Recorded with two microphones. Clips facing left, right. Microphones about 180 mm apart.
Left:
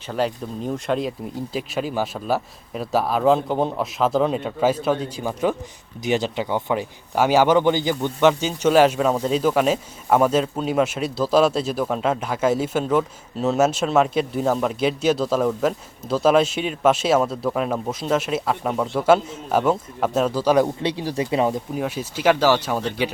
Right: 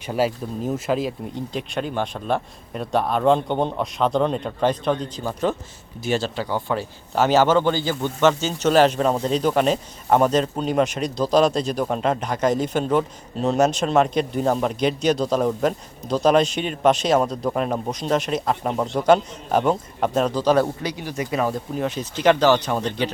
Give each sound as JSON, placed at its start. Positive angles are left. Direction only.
{"t": 0.1, "sound": "a man's voice", "side_deg": -5}
{"t": 20.8, "sound": "speech", "side_deg": 30}
{"t": 21.8, "sound": "speech", "side_deg": 10}